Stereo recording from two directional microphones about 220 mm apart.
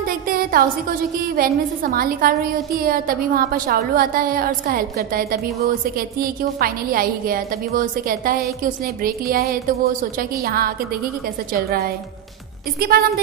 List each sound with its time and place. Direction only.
0.0 s a woman's voice: 40° right (ahead or behind)